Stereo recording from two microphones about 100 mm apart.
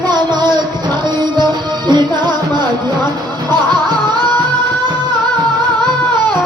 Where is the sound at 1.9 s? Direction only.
45° right (ahead or behind).